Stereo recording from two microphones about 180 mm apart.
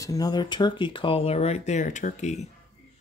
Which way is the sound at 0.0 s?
20° left (ahead or behind).